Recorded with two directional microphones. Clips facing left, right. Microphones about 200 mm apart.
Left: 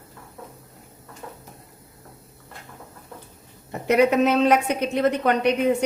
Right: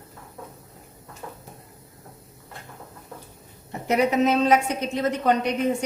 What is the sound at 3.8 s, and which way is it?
A woman's voice, 60° left (ahead or behind).